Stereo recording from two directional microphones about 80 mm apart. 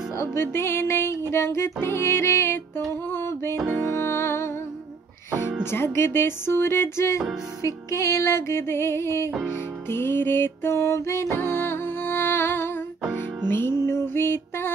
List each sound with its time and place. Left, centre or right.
0.1 s music: left
5.6 s music: left